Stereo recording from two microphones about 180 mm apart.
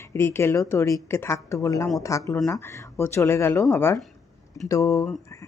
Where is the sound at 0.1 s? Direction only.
15° left (ahead or behind).